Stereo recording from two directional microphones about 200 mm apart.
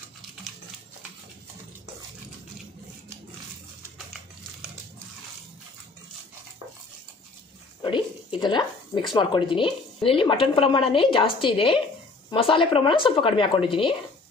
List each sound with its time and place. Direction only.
7.8 s speech: 25° left (ahead or behind)